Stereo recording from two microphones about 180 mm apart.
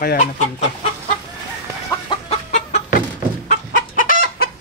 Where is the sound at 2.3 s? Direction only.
40° left (ahead or behind).